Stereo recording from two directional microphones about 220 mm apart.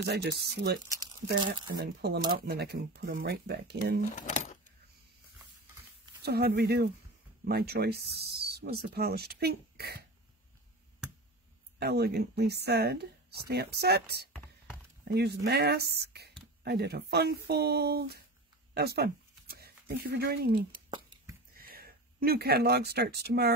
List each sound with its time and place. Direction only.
0.0 s speech: 50° right (ahead or behind)
1.8 s speech: 45° right (ahead or behind)
4.1 s speech: 35° left (ahead or behind)
6.2 s speech: 45° right (ahead or behind)
11.8 s speech: 45° right (ahead or behind)